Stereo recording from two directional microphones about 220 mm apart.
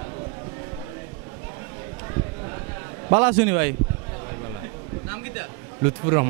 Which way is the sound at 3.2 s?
10° right (ahead or behind).